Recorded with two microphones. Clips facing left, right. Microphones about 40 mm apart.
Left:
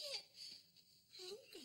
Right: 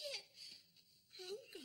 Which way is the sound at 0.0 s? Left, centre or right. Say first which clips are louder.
Right 2 dB; centre.